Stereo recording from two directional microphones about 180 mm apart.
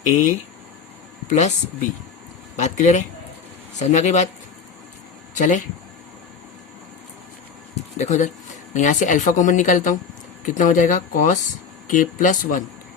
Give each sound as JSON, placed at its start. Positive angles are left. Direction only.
{"t": 1.3, "sound": "speech", "side_deg": 40}
{"t": 2.6, "sound": "speech", "side_deg": 40}
{"t": 5.3, "sound": "speech", "side_deg": 45}
{"t": 7.9, "sound": "speech", "side_deg": 40}